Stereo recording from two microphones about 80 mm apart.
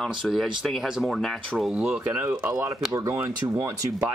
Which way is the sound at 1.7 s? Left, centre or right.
Centre.